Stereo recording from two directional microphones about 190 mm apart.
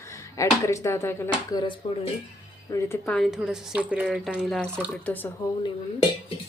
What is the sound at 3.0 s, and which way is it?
Speech, centre (ahead or behind).